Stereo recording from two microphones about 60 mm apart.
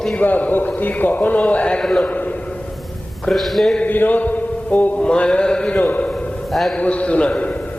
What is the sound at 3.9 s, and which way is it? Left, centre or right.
Mantra, left.